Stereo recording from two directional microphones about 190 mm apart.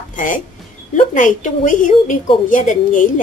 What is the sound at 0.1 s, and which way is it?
Music, 45° left (ahead or behind).